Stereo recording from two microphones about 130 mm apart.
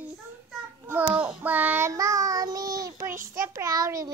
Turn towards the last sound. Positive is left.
turn(degrees=-25)  # may be behind; listen again after turning